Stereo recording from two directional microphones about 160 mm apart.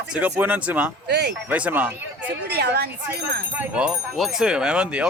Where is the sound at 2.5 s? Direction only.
90° right.